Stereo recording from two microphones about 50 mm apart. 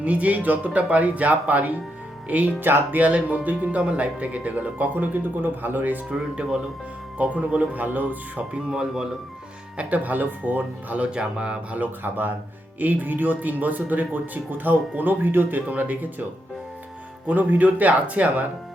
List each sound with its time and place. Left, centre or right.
0.0 s speech: right
2.6 s speech: right
3.0 s speech: right
4.9 s speech: right
6.1 s speech: right
8.5 s speech: centre
9.7 s speech: right
11.8 s speech: right
17.2 s speech: right